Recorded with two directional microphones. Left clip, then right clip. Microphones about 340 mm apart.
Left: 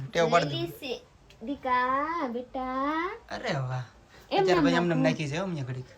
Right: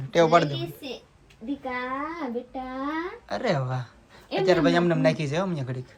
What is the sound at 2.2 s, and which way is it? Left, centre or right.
Speech, centre.